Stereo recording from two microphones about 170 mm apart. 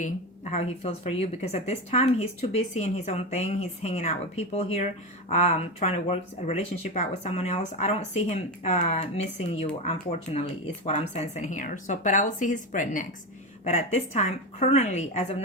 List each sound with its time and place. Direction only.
0.5 s a woman's voice: 40° left (ahead or behind)